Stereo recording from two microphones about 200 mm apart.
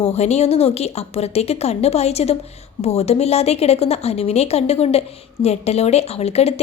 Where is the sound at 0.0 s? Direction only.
30° left (ahead or behind).